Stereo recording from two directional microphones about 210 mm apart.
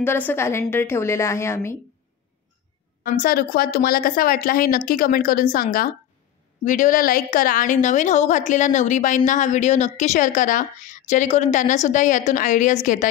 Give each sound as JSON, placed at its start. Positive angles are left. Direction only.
{"t": 0.0, "sound": "a woman's voice", "side_deg": 10}
{"t": 3.0, "sound": "a woman's voice", "side_deg": 45}